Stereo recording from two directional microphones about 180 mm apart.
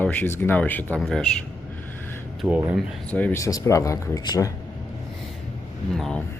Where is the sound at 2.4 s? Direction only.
10° right (ahead or behind).